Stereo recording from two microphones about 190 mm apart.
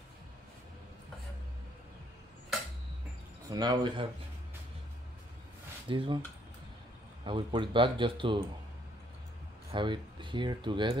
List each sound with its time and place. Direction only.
3.4 s speech: 20° right (ahead or behind)
5.9 s speech: 25° right (ahead or behind)
7.2 s speech: 25° right (ahead or behind)
9.7 s speech: 25° right (ahead or behind)